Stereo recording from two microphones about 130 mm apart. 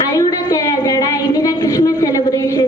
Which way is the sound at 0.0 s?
25° left (ahead or behind).